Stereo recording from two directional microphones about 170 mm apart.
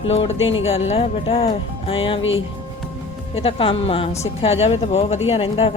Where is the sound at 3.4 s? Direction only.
30° left (ahead or behind).